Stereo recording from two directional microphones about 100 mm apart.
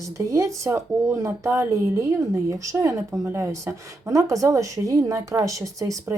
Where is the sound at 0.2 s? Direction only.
30° right (ahead or behind).